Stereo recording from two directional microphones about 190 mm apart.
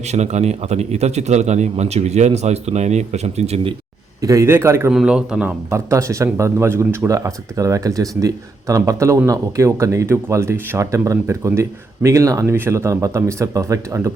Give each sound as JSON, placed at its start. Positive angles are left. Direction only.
{"t": 0.1, "sound": "a man's voice", "side_deg": -35}
{"t": 4.2, "sound": "speech", "side_deg": -15}